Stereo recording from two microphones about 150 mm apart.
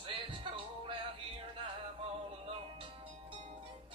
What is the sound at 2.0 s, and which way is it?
Music, 35° right (ahead or behind).